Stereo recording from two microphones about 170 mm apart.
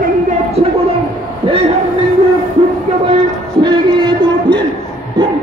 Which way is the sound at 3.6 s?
25° right (ahead or behind).